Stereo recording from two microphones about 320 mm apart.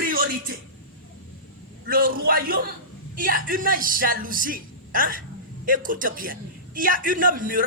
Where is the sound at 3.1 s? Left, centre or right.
Right.